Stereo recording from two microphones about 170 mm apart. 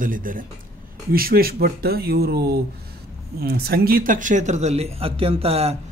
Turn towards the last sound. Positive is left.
turn(degrees=-35)  # may be behind; listen again after turning